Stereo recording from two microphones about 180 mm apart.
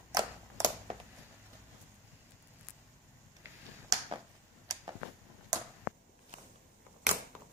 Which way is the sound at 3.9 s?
20° right (ahead or behind).